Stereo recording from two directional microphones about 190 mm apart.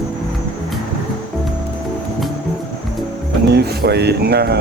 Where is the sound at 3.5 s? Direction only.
60° right (ahead or behind).